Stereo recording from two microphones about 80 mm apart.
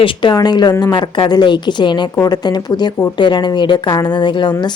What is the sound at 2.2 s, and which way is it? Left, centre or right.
Speech, left.